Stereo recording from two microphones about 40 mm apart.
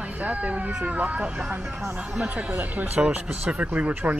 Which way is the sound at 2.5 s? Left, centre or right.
Right.